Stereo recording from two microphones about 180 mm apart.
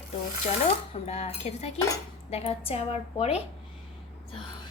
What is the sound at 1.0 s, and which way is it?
A woman's voice, 35° left (ahead or behind).